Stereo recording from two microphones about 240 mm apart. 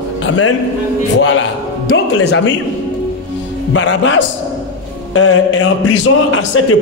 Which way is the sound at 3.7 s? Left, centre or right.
Left.